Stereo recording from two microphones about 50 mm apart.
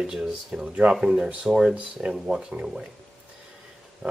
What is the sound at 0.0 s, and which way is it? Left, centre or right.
Speech, centre.